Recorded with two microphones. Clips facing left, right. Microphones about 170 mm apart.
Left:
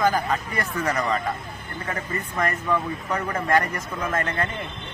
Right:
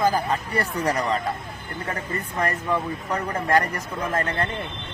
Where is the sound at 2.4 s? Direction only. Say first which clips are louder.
Even; 35° right (ahead or behind).